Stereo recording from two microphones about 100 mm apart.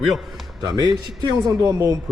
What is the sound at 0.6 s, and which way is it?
A man's voice, 45° right (ahead or behind).